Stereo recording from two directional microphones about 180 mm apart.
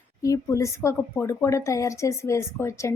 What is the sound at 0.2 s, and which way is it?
A woman's voice, 15° left (ahead or behind).